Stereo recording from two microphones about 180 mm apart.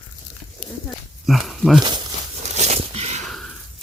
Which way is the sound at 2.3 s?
40° right (ahead or behind).